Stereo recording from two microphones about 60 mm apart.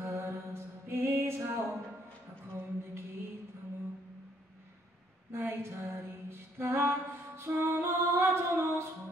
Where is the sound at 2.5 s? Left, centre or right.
Right.